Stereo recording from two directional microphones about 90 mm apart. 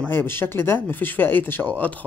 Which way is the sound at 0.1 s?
25° left (ahead or behind).